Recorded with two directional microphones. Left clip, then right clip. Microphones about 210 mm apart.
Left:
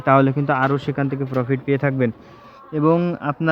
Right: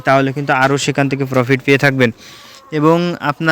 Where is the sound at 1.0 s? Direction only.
30° right (ahead or behind).